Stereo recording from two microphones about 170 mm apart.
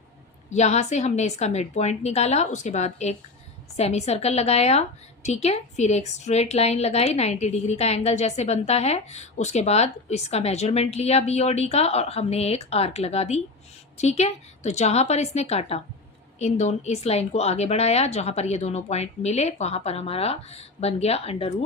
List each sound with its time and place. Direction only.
0.5 s a woman's voice: 40° left (ahead or behind)